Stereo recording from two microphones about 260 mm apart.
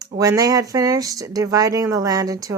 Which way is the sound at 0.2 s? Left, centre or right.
Centre.